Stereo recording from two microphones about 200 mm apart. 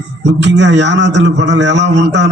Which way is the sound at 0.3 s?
60° right (ahead or behind).